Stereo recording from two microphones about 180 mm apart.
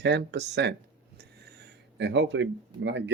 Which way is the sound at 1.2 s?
65° right (ahead or behind).